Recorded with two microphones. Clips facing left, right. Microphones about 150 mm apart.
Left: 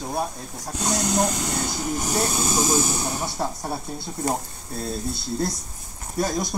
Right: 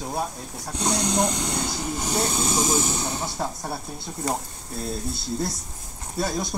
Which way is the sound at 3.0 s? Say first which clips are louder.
Left 1 dB; 15° left (ahead or behind).